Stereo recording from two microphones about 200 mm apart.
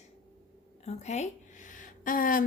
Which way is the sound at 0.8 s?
35° left (ahead or behind).